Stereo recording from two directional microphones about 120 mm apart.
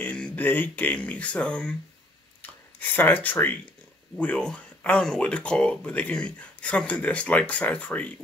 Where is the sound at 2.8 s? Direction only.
15° left (ahead or behind).